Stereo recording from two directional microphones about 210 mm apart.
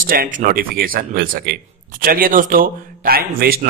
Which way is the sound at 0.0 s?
40° right (ahead or behind).